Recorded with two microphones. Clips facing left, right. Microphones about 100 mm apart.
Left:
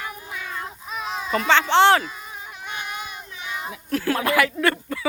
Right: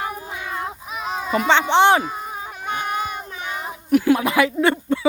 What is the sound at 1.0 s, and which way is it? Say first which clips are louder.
A child's voice: right 3 dB; 10° right (ahead or behind).